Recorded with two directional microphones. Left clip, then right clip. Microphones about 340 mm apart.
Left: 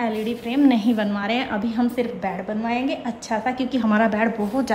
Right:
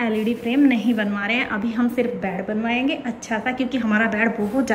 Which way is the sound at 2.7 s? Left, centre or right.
Left.